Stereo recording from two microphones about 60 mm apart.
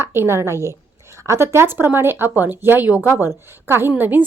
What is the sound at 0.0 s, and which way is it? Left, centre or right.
A woman's voice, right.